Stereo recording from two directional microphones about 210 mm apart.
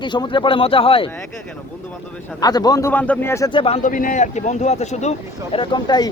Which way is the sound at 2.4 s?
20° left (ahead or behind).